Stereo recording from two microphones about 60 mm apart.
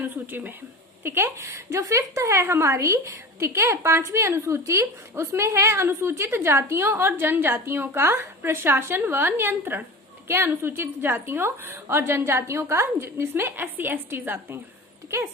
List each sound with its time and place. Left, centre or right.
0.0 s a woman's voice: right
1.0 s a woman's voice: right